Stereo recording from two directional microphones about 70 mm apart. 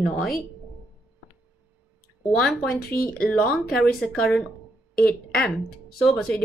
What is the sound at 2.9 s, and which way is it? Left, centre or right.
Speech, left.